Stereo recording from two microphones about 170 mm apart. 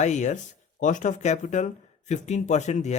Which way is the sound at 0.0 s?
45° left (ahead or behind).